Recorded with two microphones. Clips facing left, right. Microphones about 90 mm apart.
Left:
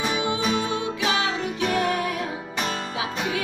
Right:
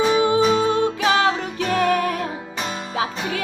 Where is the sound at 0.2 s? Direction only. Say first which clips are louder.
Right 7 dB; 40° right (ahead or behind).